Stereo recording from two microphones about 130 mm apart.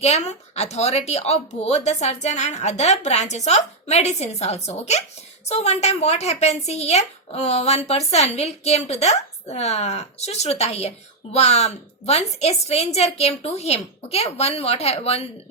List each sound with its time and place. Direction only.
0.0 s speech: 55° left (ahead or behind)